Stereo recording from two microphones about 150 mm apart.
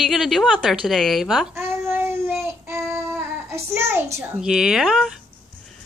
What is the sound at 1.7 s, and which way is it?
Child singing, 15° right (ahead or behind).